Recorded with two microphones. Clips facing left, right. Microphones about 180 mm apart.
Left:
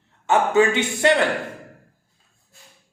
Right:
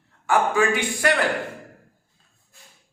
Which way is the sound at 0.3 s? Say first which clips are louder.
Left 3 dB; 25° left (ahead or behind).